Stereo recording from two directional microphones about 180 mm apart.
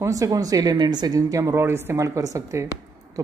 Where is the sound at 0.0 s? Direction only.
20° right (ahead or behind).